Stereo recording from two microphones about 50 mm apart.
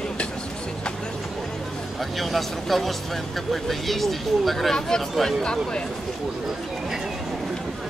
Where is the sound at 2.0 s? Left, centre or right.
Centre.